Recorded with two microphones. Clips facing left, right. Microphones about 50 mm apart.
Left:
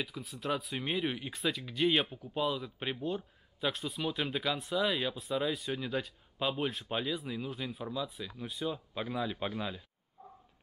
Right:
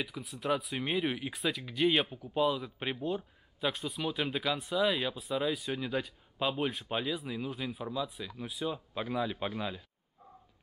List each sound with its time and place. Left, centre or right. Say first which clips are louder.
0.0 s speech: right 1 dB; centre